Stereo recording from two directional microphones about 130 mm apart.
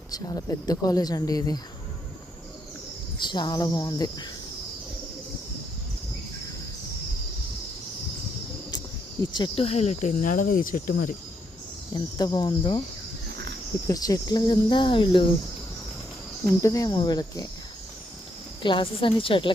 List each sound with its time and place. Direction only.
0.1 s speech: 30° left (ahead or behind)
3.2 s speech: 35° left (ahead or behind)
9.2 s speech: 35° left (ahead or behind); by 11.1 s 90° left
11.9 s speech: 35° left (ahead or behind)
13.8 s speech: 30° left (ahead or behind)
16.5 s speech: 25° left (ahead or behind)
18.6 s speech: 40° left (ahead or behind)